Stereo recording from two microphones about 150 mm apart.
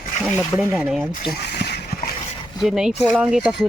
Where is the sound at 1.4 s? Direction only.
90° left.